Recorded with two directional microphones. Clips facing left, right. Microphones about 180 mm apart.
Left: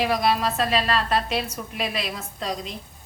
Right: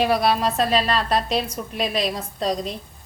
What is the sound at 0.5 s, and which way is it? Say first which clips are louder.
A woman's voice: right 2 dB; 35° right (ahead or behind).